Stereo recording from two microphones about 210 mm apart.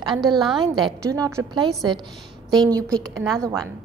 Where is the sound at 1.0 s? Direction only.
15° right (ahead or behind).